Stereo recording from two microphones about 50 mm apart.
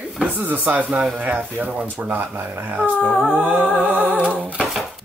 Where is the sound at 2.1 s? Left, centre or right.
Right.